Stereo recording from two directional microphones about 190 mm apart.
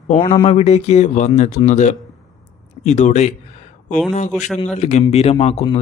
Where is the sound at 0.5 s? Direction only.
35° left (ahead or behind).